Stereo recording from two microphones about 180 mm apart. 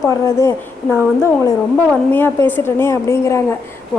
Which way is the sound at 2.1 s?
10° left (ahead or behind).